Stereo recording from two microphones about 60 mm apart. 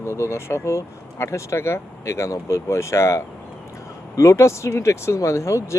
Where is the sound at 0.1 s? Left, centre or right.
Left.